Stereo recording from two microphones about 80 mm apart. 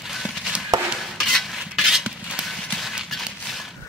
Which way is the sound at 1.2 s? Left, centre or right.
Centre.